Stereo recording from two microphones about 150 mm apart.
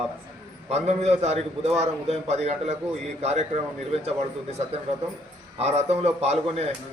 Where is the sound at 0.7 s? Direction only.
45° right (ahead or behind).